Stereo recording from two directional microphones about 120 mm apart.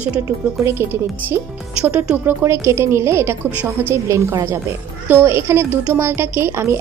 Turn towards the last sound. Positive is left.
turn(degrees=-20)  # may be behind; listen again after turning